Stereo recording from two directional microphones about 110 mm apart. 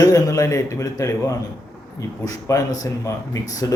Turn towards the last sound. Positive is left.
turn(degrees=30)  # may be behind; listen again after turning